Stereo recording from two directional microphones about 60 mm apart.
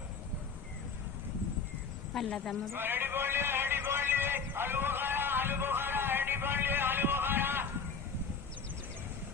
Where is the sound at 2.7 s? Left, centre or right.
Right.